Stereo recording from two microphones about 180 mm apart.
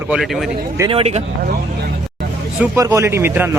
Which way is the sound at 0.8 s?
35° right (ahead or behind).